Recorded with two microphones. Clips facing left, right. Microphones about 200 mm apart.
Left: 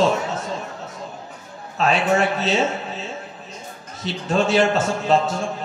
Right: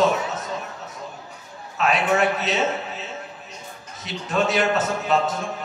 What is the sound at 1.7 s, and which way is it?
A man's voice, 30° left (ahead or behind).